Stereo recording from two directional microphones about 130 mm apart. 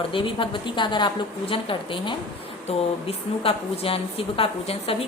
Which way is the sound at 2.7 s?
50° left (ahead or behind).